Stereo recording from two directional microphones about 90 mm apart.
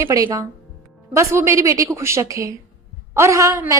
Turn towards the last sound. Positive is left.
turn(degrees=-35)  # may be behind; listen again after turning